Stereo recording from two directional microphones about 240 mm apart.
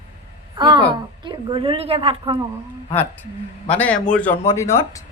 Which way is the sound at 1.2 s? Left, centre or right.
Centre.